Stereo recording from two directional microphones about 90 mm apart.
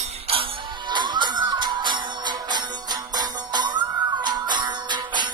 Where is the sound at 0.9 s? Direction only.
55° right (ahead or behind).